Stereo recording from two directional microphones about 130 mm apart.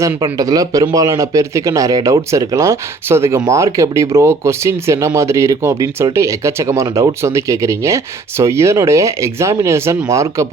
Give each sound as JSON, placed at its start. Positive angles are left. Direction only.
{"t": 0.0, "sound": "speech", "side_deg": -25}